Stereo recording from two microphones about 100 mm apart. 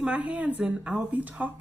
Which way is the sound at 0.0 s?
15° right (ahead or behind).